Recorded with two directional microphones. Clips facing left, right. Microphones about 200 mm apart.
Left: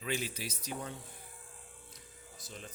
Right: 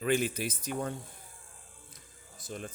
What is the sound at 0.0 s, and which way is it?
Speech, 55° right (ahead or behind).